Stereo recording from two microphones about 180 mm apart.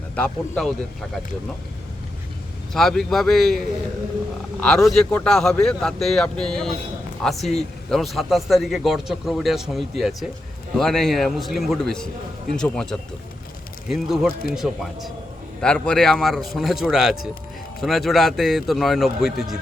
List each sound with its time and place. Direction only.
0.2 s a man's voice: 5° left (ahead or behind)
2.7 s a man's voice: centre (ahead or behind)
4.9 s a man's voice: 5° left (ahead or behind)